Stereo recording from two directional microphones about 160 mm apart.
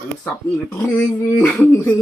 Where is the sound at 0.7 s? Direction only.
15° left (ahead or behind).